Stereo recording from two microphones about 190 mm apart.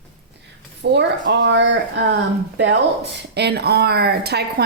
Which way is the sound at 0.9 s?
65° right (ahead or behind).